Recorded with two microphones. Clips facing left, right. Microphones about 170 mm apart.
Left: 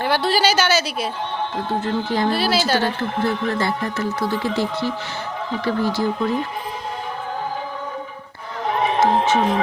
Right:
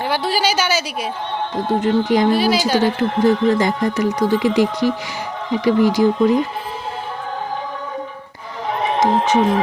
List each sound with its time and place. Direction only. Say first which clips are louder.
0.0 s speech: left 1 dB; 10° right (ahead or behind)
9.0 s speech: right 2 dB; 15° right (ahead or behind)